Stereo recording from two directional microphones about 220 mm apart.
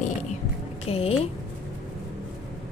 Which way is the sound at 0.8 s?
25° left (ahead or behind).